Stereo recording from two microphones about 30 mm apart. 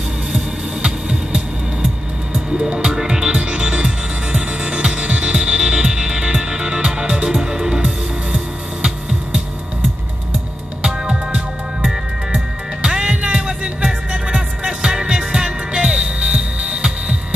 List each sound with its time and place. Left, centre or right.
0.8 s music: right
12.8 s music: right
13.8 s music: centre
14.6 s music: right